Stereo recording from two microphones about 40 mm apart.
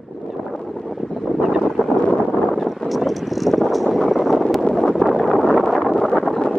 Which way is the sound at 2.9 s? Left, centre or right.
Centre.